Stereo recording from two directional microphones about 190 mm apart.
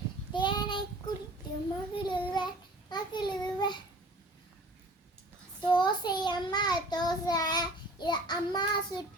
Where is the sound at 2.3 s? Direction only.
25° left (ahead or behind).